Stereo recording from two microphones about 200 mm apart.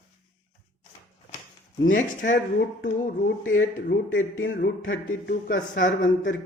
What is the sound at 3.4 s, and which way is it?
Speech, 85° left.